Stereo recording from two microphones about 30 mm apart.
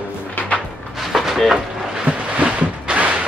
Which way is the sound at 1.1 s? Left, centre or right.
Centre.